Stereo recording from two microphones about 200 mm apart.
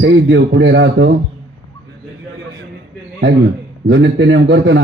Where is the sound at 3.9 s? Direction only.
60° right (ahead or behind).